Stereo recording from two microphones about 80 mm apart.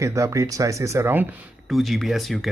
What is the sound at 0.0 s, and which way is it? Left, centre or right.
Speech, right.